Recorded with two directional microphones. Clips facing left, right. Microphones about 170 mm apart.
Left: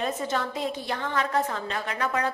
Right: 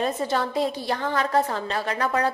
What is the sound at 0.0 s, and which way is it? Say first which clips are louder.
A woman's voice: right 4 dB; 35° right (ahead or behind).